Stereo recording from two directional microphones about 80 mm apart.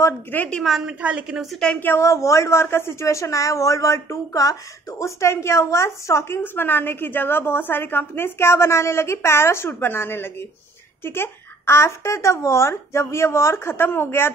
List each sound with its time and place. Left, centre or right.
0.5 s a woman's voice: centre
0.8 s a woman's voice: centre
2.0 s speech: left